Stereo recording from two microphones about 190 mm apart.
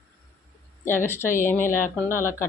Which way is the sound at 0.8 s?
10° left (ahead or behind).